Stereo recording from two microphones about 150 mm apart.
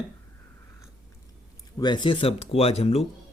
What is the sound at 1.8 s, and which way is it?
Speech, 30° left (ahead or behind).